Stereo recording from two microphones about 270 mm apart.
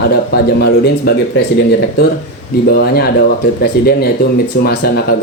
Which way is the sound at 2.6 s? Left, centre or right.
Left.